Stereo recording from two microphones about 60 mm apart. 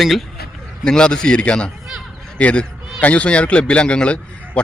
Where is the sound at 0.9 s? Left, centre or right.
Centre.